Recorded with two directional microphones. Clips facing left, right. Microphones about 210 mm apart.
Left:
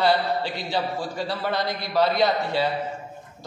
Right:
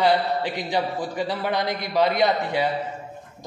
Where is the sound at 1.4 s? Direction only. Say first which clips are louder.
Right 1 dB; 15° right (ahead or behind).